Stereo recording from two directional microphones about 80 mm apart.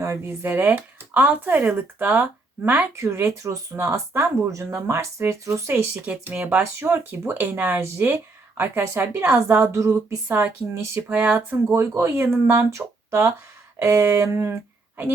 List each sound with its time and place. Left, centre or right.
0.0 s speech: right
2.9 s speech: right
3.5 s speech: right
5.9 s speech: centre; by 10.4 s right
11.1 s speech: centre
11.6 s speech: right
12.3 s speech: right
12.7 s speech: right